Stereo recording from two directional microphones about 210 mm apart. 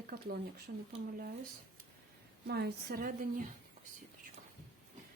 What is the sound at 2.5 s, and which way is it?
A woman's voice, 50° right (ahead or behind).